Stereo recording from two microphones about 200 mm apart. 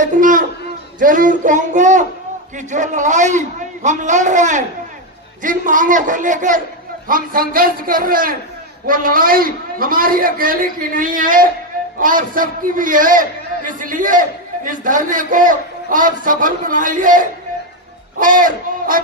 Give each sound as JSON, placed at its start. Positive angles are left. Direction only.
{"t": 0.0, "sound": "a man's voice", "side_deg": -40}